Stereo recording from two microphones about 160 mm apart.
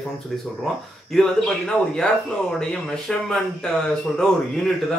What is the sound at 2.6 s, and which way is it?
Speech, 5° left (ahead or behind).